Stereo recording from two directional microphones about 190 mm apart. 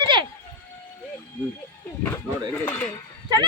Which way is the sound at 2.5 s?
10° left (ahead or behind).